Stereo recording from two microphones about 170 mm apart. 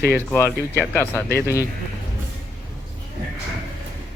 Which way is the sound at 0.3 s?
15° left (ahead or behind).